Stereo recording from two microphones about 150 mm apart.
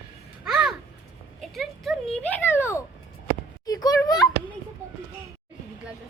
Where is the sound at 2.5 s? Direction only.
15° left (ahead or behind).